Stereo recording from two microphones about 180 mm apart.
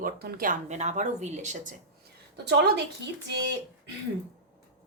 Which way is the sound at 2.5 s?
70° right (ahead or behind).